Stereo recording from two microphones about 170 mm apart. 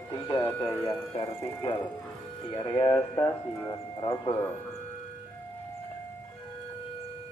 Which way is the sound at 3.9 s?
25° left (ahead or behind).